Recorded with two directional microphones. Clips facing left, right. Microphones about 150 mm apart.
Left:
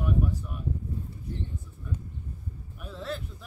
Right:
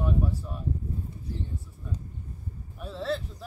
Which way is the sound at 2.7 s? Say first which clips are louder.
Right 5 dB; 30° right (ahead or behind).